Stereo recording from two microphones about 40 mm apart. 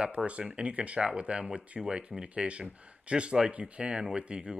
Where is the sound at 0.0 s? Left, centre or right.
Right.